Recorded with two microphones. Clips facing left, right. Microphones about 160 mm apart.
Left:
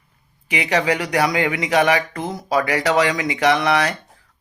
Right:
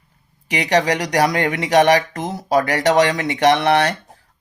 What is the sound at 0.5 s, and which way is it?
Speech, 35° right (ahead or behind).